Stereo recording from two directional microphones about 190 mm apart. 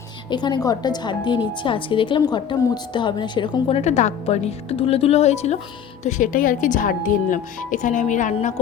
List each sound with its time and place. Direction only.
0.3 s a woman's voice: 25° left (ahead or behind)